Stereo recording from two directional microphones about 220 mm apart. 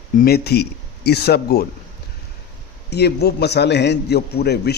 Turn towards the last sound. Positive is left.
turn(degrees=45)  # may be behind; listen again after turning